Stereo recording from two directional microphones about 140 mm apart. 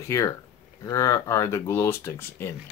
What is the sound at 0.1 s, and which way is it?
Speech, 20° left (ahead or behind).